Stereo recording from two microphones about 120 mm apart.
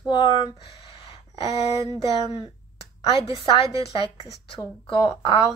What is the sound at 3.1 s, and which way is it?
Speech, 45° left (ahead or behind).